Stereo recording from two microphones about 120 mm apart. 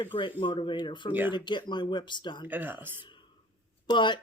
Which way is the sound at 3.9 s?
40° left (ahead or behind).